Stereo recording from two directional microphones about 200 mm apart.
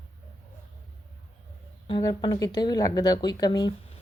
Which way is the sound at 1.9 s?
20° left (ahead or behind).